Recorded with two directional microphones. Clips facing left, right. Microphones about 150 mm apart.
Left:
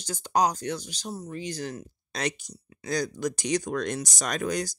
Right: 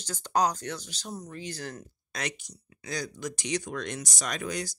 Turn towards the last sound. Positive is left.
turn(degrees=45)  # may be behind; listen again after turning